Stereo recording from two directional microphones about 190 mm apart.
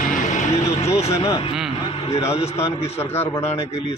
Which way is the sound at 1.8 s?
30° left (ahead or behind).